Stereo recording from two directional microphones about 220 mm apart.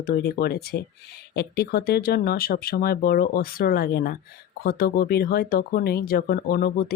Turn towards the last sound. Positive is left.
turn(degrees=45)  # may be behind; listen again after turning